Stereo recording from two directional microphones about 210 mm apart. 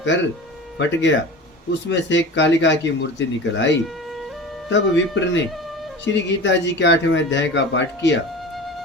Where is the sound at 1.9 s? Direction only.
60° left (ahead or behind).